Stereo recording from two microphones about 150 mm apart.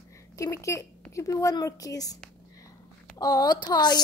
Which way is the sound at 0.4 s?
20° left (ahead or behind).